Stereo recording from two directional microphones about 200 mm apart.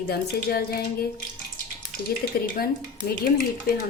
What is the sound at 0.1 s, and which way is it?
Speech, 50° left (ahead or behind).